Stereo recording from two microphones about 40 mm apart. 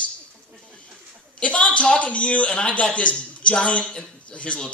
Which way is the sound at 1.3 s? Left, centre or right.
Left.